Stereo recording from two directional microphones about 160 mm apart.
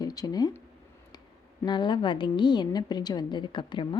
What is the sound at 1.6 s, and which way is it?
A woman's voice, 30° left (ahead or behind).